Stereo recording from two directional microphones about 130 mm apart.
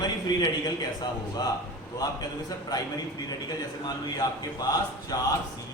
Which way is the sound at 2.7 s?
30° left (ahead or behind).